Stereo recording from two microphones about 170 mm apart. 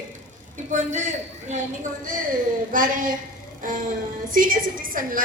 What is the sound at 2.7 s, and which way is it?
A woman's voice, 55° right (ahead or behind).